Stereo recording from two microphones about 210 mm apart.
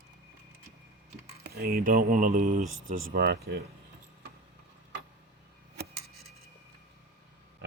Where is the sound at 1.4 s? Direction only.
45° right (ahead or behind).